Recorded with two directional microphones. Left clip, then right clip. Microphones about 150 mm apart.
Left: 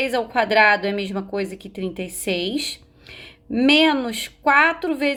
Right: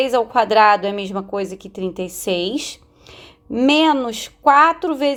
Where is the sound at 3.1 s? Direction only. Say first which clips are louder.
Right 2 dB; 30° right (ahead or behind).